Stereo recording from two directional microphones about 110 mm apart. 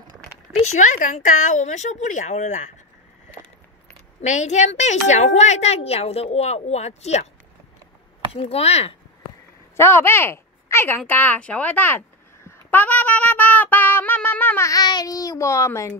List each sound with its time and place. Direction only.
0.7 s a woman's voice: 90° left
4.2 s a woman's voice: 90° left
8.3 s speech: 65° left (ahead or behind)
9.8 s speech: 20° left (ahead or behind)
12.4 s a sound: 15° left (ahead or behind)
14.7 s a child's voice: 35° left (ahead or behind)